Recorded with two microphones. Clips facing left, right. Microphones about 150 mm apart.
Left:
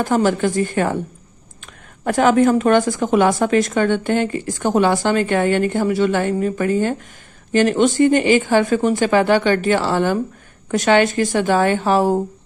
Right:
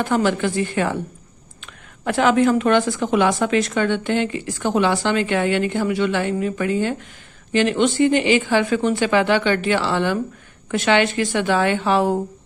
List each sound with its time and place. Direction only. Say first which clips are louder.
0.0 s a woman's voice: left 2 dB; 40° left (ahead or behind)